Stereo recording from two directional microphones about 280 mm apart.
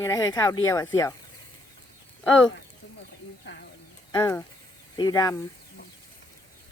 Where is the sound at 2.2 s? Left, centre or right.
Centre.